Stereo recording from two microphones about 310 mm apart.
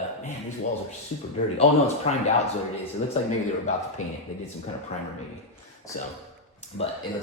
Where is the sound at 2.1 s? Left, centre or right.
Left.